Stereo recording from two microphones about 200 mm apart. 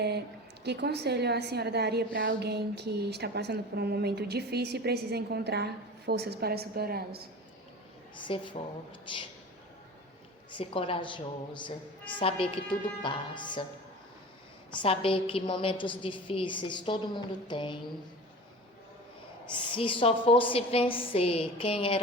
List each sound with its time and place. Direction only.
0.6 s a woman's voice: 55° right (ahead or behind)
8.1 s a woman's voice: 25° left (ahead or behind)
10.5 s a woman's voice: 25° left (ahead or behind)
14.8 s a woman's voice: 25° left (ahead or behind)
19.7 s a woman's voice: 25° left (ahead or behind)